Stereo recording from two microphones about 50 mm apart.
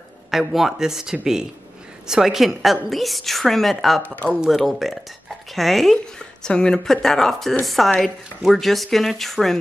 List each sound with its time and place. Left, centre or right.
0.3 s a woman's voice: centre
4.0 s speech: left
4.5 s a woman's voice: centre
6.1 s a woman's voice: centre